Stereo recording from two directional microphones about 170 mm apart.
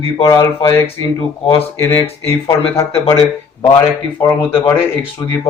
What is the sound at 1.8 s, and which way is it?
Speech, 15° left (ahead or behind).